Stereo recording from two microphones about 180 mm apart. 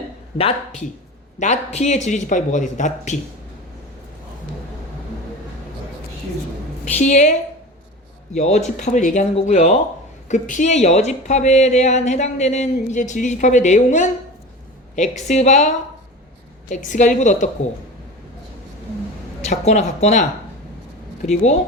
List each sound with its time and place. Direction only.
0.3 s a woman's voice: 30° left (ahead or behind)
6.8 s a woman's voice: 40° left (ahead or behind)
19.4 s a woman's voice: 40° left (ahead or behind)